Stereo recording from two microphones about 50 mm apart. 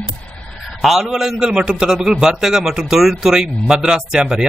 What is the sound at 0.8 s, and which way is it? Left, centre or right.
Speech, centre.